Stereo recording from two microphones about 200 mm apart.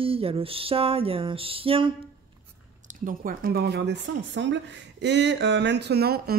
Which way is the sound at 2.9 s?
45° right (ahead or behind).